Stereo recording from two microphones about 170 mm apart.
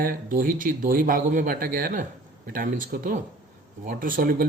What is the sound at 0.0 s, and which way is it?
Speech, 55° right (ahead or behind).